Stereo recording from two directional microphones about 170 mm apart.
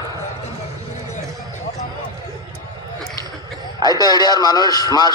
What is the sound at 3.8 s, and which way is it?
A man's voice, 25° left (ahead or behind).